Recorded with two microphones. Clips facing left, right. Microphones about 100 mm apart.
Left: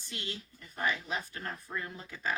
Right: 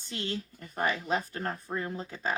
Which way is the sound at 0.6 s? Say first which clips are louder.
Right 3 dB; 50° right (ahead or behind).